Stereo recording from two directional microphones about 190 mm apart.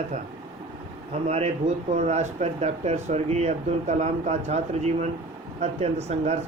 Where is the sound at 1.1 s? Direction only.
35° right (ahead or behind).